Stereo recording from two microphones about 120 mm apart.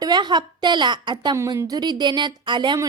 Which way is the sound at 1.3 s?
25° right (ahead or behind).